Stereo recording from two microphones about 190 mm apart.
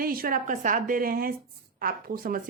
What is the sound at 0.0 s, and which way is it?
Speech, 50° right (ahead or behind).